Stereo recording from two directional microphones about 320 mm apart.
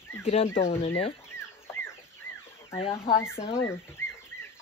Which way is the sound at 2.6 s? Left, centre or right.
Centre.